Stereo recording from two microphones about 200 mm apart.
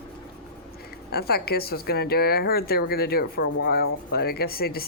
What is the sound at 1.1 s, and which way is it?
Speech, 50° left (ahead or behind).